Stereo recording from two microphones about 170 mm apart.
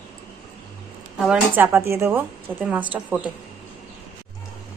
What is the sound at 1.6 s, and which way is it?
A woman's voice, 15° right (ahead or behind).